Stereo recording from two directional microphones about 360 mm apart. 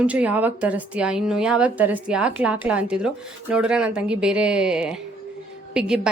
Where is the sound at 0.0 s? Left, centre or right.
Centre.